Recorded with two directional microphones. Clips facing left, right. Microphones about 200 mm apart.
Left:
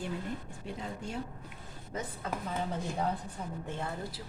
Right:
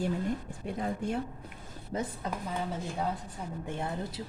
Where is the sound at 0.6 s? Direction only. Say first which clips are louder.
Right 6 dB; 55° right (ahead or behind).